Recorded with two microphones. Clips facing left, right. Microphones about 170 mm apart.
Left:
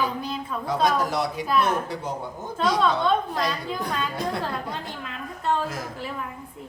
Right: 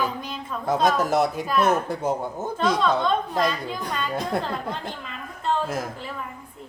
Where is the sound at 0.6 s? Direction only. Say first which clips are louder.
Right 2 dB; 45° right (ahead or behind).